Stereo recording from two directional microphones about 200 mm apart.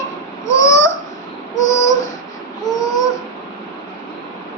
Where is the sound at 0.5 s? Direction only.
15° left (ahead or behind).